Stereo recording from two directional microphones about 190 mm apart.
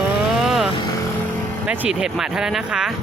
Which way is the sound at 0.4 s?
Centre (ahead or behind).